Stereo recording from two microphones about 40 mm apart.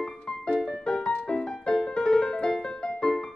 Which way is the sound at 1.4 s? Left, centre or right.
Centre.